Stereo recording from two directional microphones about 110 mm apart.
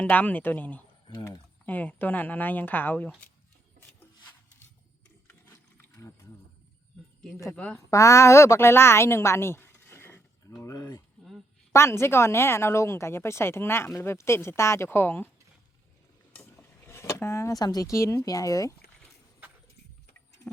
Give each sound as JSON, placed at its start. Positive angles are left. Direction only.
{"t": 0.0, "sound": "speech", "side_deg": 15}
{"t": 5.3, "sound": "ratchet", "side_deg": 20}
{"t": 7.5, "sound": "speech", "side_deg": 10}
{"t": 7.9, "sound": "a woman's voice", "side_deg": 30}
{"t": 10.6, "sound": "speech", "side_deg": 30}
{"t": 11.2, "sound": "a sound", "side_deg": 0}
{"t": 11.7, "sound": "a woman's voice", "side_deg": 25}
{"t": 16.4, "sound": "a sound", "side_deg": 25}
{"t": 18.3, "sound": "speech", "side_deg": 30}